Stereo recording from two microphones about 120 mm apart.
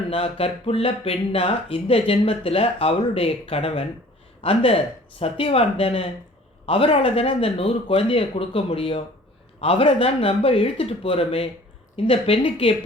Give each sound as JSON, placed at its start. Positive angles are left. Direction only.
{"t": 0.1, "sound": "speech", "side_deg": 55}